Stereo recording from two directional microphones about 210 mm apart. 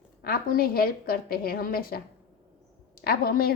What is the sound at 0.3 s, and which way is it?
A woman's voice, 45° left (ahead or behind).